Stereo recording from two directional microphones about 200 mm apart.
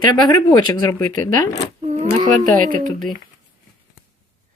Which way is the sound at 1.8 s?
30° right (ahead or behind).